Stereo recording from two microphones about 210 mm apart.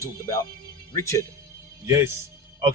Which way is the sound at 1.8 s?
15° right (ahead or behind).